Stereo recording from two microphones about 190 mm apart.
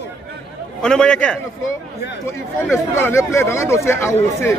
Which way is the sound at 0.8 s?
5° left (ahead or behind).